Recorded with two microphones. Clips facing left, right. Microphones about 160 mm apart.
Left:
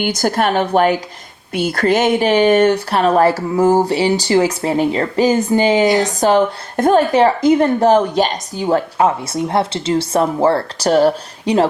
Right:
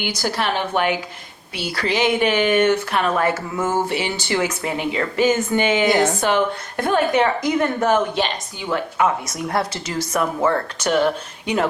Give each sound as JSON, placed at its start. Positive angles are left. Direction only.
{"t": 0.0, "sound": "a woman's voice", "side_deg": 50}